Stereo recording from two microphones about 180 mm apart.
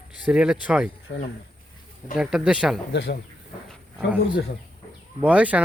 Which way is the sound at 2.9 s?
70° left (ahead or behind).